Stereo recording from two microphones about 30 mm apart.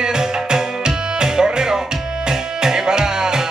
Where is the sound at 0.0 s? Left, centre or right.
Right.